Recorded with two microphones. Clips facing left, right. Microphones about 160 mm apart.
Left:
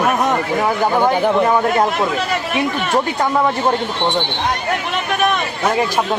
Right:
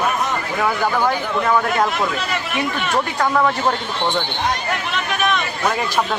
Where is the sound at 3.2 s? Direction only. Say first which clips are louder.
Right 1 dB; 20° left (ahead or behind).